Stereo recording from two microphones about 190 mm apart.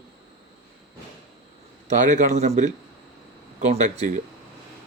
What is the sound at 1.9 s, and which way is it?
Speech, 40° right (ahead or behind).